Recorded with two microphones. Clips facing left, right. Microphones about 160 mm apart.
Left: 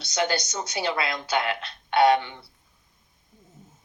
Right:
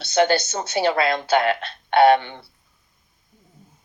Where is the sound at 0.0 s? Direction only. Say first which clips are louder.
Right 8 dB; 55° right (ahead or behind).